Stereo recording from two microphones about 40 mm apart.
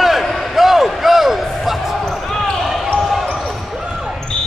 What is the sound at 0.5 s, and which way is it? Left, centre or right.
Basketball bounce, centre.